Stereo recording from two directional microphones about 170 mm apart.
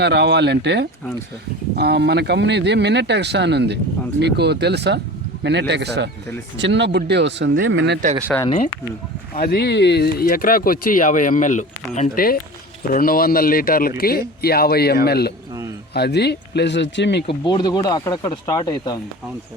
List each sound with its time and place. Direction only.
0.0 s speech: 80° right
1.7 s speech: 75° right (ahead or behind)
5.4 s speech: 90° right
8.3 s speech: 10° left (ahead or behind)
9.3 s speech: 65° left (ahead or behind); by 17.2 s 90° left
17.2 s speech: 25° left (ahead or behind)